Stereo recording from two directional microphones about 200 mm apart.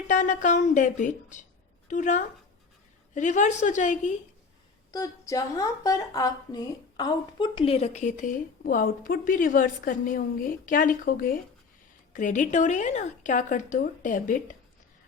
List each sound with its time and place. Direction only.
0.1 s a woman's voice: 40° left (ahead or behind)
4.9 s a woman's voice: 15° left (ahead or behind); by 14.5 s 40° left (ahead or behind)